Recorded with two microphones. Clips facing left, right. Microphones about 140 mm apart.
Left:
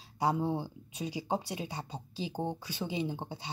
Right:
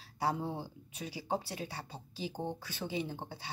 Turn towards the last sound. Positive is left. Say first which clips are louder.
# left 5 dB
turn(degrees=20)  # may be behind; listen again after turning